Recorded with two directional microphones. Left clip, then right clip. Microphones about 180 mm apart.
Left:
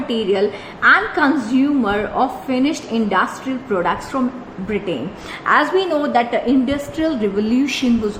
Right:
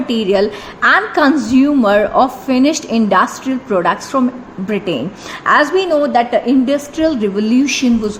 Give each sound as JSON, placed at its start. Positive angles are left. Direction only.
{"t": 0.1, "sound": "a woman's voice", "side_deg": -55}
{"t": 5.5, "sound": "a woman's voice", "side_deg": -35}